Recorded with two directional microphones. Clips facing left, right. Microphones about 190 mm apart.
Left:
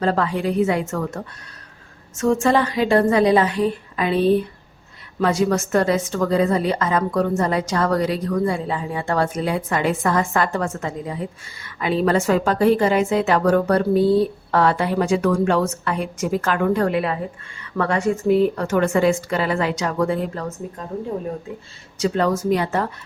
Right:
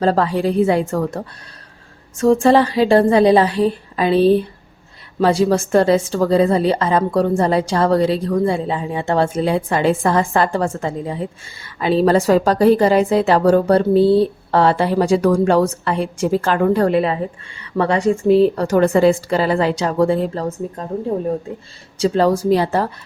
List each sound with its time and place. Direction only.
0.0 s a woman's voice: 35° right (ahead or behind)
21.9 s a woman's voice: 30° right (ahead or behind)